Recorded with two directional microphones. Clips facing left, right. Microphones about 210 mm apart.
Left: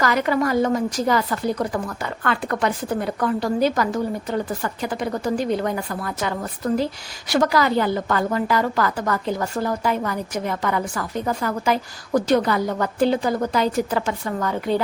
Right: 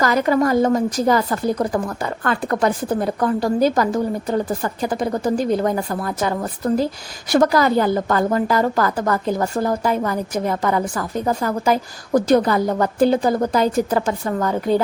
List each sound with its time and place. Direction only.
0.0 s a woman's voice: 40° right (ahead or behind)